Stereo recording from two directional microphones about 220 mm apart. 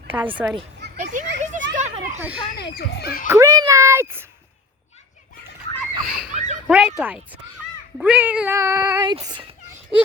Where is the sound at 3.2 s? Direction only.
15° right (ahead or behind).